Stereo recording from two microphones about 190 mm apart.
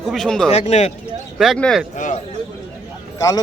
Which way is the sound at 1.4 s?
Centre (ahead or behind).